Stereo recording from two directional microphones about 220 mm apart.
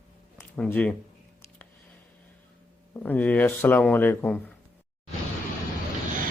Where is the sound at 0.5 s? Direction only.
5° left (ahead or behind).